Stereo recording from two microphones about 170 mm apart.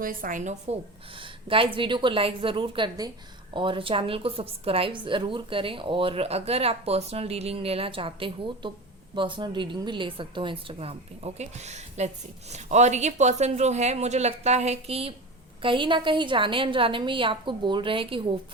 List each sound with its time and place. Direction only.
0.0 s a woman's voice: 55° right (ahead or behind)
1.1 s a woman's voice: 30° right (ahead or behind)